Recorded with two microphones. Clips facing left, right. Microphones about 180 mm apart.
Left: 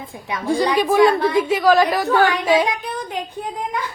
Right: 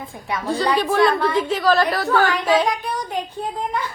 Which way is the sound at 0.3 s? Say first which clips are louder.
Left 2 dB; 15° left (ahead or behind).